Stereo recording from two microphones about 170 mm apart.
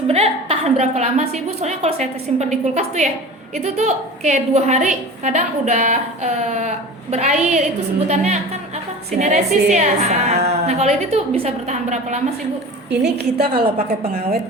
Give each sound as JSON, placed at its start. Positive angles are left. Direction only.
{"t": 0.1, "sound": "a woman's voice", "side_deg": -35}
{"t": 12.9, "sound": "a woman's voice", "side_deg": -75}
{"t": 13.5, "sound": "a woman's voice", "side_deg": -35}